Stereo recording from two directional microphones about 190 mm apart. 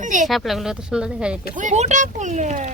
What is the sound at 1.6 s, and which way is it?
Speech, 40° right (ahead or behind).